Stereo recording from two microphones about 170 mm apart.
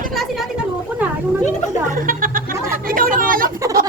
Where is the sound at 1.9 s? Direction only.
50° right (ahead or behind).